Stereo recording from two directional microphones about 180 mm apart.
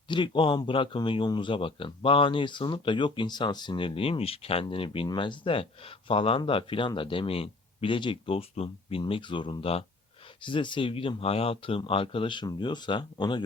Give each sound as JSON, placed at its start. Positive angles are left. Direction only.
{"t": 0.1, "sound": "speech", "side_deg": 25}